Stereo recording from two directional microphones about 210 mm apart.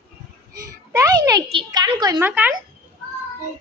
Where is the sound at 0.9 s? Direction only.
15° right (ahead or behind).